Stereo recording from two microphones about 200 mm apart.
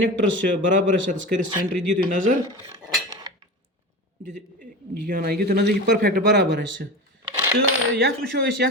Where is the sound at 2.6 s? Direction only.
20° right (ahead or behind).